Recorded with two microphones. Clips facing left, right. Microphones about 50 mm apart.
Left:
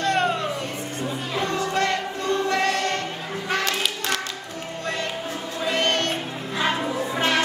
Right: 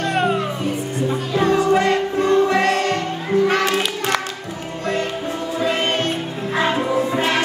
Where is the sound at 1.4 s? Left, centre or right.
Right.